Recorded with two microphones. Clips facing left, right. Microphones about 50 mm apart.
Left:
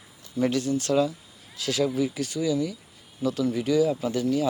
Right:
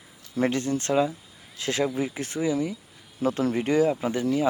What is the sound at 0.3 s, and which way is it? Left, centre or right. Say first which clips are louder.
Speech: even; right.